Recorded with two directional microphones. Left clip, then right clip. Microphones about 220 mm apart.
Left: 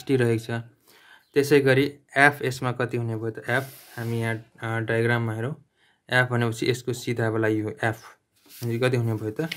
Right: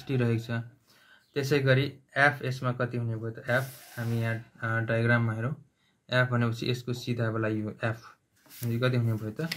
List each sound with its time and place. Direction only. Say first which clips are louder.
0.0 s speech: left 8 dB; 40° left (ahead or behind)